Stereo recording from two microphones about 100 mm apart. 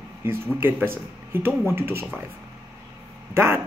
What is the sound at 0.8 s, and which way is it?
Speech, 20° right (ahead or behind).